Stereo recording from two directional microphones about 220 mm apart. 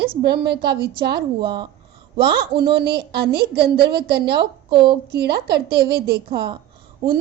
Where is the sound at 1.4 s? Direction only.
20° right (ahead or behind).